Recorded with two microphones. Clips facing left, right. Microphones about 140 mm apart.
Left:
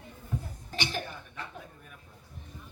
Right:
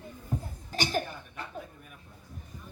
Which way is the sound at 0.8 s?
45° right (ahead or behind).